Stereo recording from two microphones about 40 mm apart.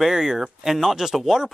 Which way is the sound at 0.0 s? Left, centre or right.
Centre.